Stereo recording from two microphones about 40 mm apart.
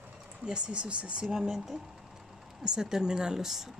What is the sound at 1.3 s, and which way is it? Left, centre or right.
Speech, centre.